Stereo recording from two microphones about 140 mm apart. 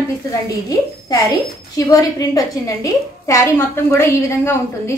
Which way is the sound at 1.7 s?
25° left (ahead or behind).